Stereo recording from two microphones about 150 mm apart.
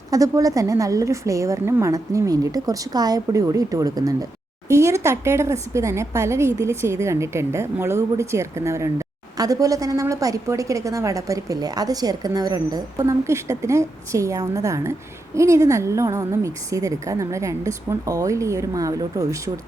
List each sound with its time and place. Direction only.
0.1 s speech: 25° right (ahead or behind)